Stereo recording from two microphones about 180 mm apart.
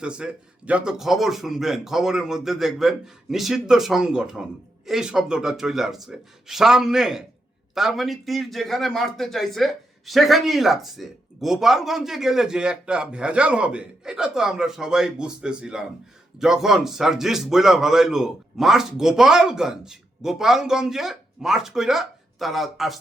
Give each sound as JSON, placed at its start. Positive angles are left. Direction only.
{"t": 0.0, "sound": "a man's voice", "side_deg": -5}